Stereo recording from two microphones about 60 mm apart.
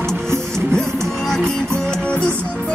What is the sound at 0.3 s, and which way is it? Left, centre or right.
Music, right.